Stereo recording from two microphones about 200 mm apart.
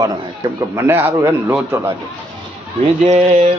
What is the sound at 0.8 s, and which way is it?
A man's voice, 10° right (ahead or behind).